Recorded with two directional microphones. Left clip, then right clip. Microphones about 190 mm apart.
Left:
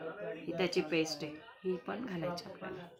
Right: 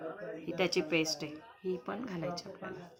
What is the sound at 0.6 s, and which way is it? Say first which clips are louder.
Speech: right 2 dB; 25° right (ahead or behind).